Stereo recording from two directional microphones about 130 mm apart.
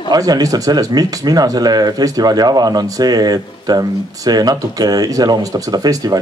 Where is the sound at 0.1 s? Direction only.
30° right (ahead or behind).